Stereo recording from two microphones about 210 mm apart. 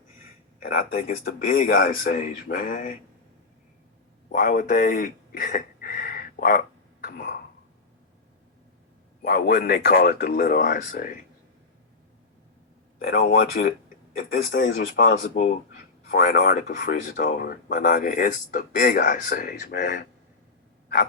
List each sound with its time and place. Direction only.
0.6 s speech: 45° left (ahead or behind)
4.3 s speech: 40° left (ahead or behind)
7.0 s cough: 50° left (ahead or behind)
9.2 s speech: 45° left (ahead or behind)
13.1 s speech: 60° left (ahead or behind)
13.5 s speech: 45° left (ahead or behind)
15.3 s speech: 35° left (ahead or behind)
16.5 s speech: 45° left (ahead or behind)